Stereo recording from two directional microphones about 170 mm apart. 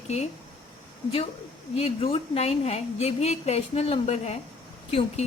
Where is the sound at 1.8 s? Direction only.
35° left (ahead or behind).